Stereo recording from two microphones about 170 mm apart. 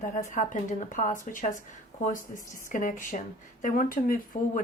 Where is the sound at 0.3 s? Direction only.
50° left (ahead or behind).